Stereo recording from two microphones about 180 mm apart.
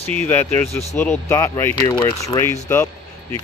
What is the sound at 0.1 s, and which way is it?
Speech, 10° left (ahead or behind).